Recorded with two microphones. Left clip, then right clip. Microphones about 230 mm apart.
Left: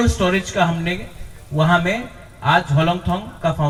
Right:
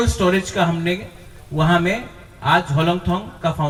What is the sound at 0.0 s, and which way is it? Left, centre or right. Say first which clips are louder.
A man's voice: even; right.